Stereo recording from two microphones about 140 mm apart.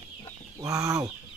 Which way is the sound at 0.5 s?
20° right (ahead or behind).